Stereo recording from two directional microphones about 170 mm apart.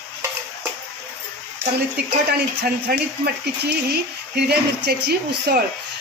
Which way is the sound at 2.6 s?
70° right (ahead or behind).